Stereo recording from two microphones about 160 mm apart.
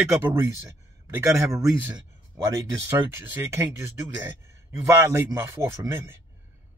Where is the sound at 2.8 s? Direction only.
15° right (ahead or behind).